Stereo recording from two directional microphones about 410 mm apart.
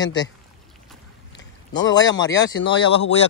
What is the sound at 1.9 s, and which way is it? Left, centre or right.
Speech, centre.